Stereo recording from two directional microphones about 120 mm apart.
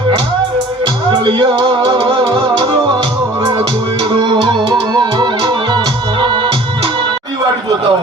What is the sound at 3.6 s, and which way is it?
Music, 40° right (ahead or behind).